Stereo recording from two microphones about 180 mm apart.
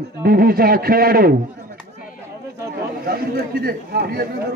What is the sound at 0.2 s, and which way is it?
Speech, 55° right (ahead or behind).